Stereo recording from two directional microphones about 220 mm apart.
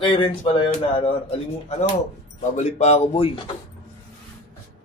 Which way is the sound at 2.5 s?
30° left (ahead or behind).